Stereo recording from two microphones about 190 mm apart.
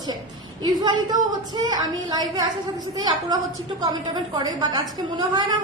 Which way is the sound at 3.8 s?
20° right (ahead or behind).